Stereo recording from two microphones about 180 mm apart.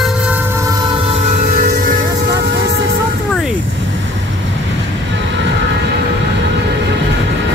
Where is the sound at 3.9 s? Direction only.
90° right.